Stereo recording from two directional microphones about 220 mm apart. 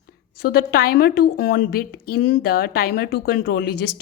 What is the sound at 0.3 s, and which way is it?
A woman's voice, 45° left (ahead or behind).